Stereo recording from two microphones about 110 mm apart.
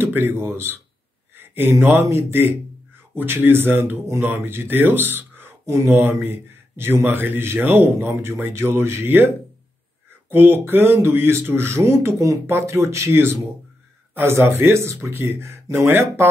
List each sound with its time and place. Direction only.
0.0 s speech: 20° right (ahead or behind)
10.3 s speech: 20° right (ahead or behind)